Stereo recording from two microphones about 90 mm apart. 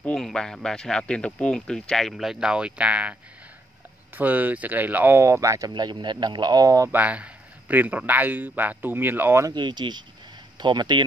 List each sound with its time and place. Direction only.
0.0 s a man's voice: 5° left (ahead or behind); by 5.2 s 20° right (ahead or behind)
5.2 s speech: 35° right (ahead or behind)
5.7 s speech: 55° right (ahead or behind)
6.9 s a man's voice: 15° right (ahead or behind)
9.5 s speech: 55° right (ahead or behind)